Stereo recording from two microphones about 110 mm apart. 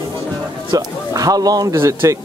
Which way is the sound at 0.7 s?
35° right (ahead or behind).